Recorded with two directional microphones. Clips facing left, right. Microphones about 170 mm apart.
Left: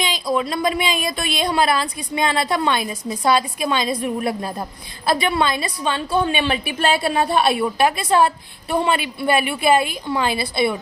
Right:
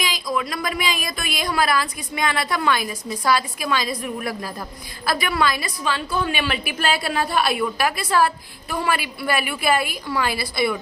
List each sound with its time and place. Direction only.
0.0 s speech: 30° left (ahead or behind)